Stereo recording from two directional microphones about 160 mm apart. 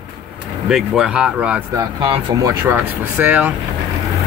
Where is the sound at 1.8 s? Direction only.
25° right (ahead or behind).